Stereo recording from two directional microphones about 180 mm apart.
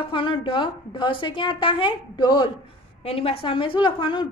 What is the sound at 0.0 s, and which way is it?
A woman's voice, 30° left (ahead or behind).